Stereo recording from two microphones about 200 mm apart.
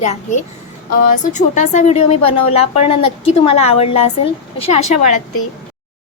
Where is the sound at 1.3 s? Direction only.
35° left (ahead or behind).